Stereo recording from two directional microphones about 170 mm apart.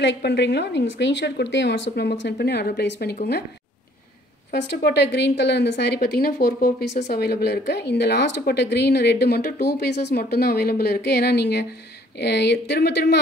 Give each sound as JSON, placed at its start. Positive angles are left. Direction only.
{"t": 0.0, "sound": "a woman's voice", "side_deg": 85}
{"t": 4.5, "sound": "a woman's voice", "side_deg": 85}
{"t": 6.0, "sound": "a woman's voice", "side_deg": 65}